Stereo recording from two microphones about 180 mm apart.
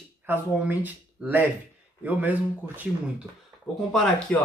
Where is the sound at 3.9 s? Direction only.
Centre (ahead or behind).